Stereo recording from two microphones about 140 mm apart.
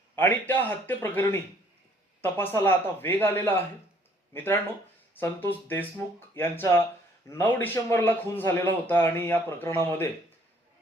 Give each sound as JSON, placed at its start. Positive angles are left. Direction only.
{"t": 0.2, "sound": "a man's voice", "side_deg": 15}
{"t": 2.2, "sound": "a man's voice", "side_deg": 15}